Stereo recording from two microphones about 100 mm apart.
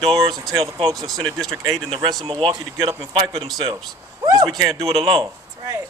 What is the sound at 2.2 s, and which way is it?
Speech, 60° right (ahead or behind).